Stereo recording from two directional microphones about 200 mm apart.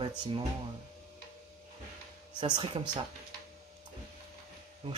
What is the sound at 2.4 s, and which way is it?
Speech, 25° right (ahead or behind).